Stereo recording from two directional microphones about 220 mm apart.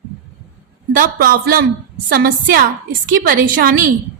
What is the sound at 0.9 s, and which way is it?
A man's voice, 40° right (ahead or behind).